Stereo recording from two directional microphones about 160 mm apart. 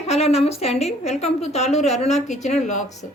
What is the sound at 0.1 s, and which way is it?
A woman's voice, 40° left (ahead or behind).